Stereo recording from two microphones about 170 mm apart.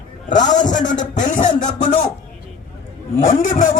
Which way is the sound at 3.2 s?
50° left (ahead or behind).